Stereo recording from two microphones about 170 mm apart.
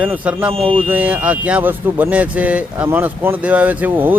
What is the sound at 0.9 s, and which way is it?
A man's voice, 10° right (ahead or behind).